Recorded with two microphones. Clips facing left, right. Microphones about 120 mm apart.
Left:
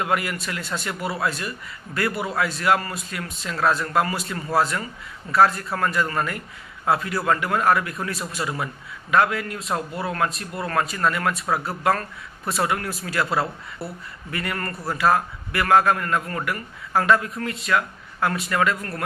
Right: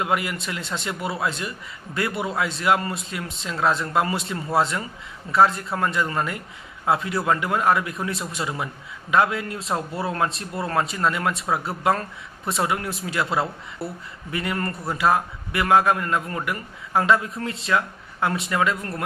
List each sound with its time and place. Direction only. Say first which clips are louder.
0.0 s a man's voice: even; 20° right (ahead or behind)